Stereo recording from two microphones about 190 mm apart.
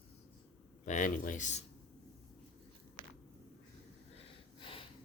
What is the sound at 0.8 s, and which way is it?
Speech, 40° left (ahead or behind).